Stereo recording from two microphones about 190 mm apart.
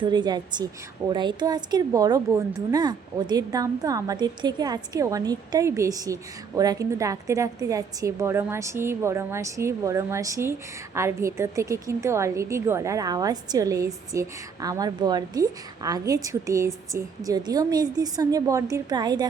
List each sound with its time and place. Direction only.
0.0 s a woman's voice: 25° right (ahead or behind)